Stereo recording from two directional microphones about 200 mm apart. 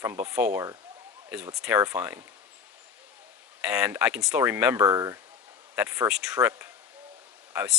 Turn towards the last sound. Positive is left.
turn(degrees=-10)  # may be behind; listen again after turning